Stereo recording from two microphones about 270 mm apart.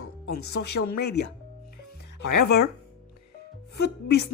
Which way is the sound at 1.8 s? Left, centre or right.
Left.